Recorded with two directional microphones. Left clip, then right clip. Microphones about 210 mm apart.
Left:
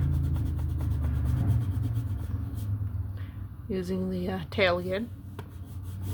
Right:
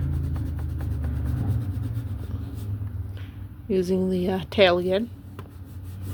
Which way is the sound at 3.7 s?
25° right (ahead or behind).